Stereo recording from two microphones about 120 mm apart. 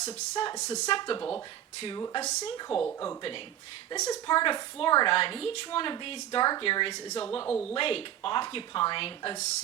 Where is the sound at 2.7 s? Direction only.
10° left (ahead or behind).